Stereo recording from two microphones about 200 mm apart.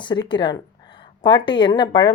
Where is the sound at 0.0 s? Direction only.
20° left (ahead or behind).